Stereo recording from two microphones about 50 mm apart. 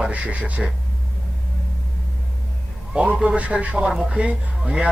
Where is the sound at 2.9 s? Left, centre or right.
Right.